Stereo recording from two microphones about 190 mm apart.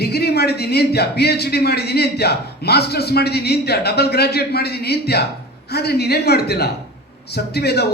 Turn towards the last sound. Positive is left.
turn(degrees=60)  # may be behind; listen again after turning